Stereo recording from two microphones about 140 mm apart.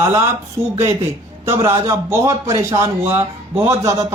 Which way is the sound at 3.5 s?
15° right (ahead or behind).